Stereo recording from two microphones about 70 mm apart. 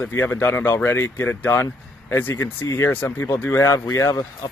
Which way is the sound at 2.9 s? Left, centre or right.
Left.